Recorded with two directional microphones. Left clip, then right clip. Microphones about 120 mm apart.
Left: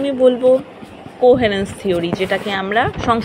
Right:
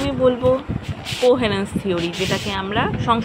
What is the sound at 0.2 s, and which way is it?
Speech, 15° left (ahead or behind).